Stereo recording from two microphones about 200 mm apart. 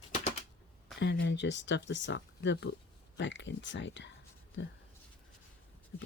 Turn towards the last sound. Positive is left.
turn(degrees=65)  # may be behind; listen again after turning